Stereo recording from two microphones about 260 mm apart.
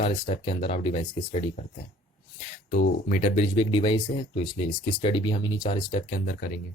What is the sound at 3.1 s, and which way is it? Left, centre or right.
Speech, left.